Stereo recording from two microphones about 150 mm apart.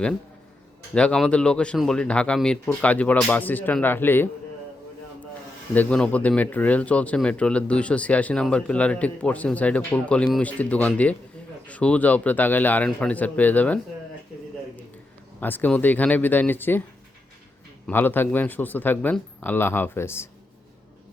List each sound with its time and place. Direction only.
0.9 s speech: 5° left (ahead or behind)
5.7 s speech: 10° left (ahead or behind)
15.4 s speech: 10° left (ahead or behind)
17.8 s speech: 15° left (ahead or behind)